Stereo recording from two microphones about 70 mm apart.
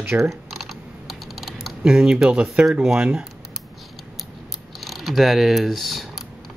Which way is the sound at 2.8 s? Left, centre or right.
Centre.